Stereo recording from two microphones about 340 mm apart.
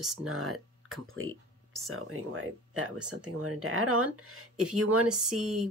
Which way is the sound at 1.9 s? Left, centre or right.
Right.